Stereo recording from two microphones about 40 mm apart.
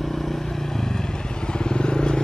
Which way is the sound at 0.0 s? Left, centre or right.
Centre.